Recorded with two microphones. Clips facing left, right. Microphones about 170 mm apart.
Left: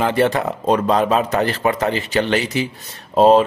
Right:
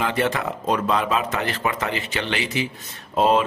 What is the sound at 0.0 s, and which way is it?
A man's voice, 35° left (ahead or behind).